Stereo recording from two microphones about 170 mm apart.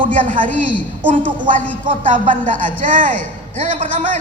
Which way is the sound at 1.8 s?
30° right (ahead or behind).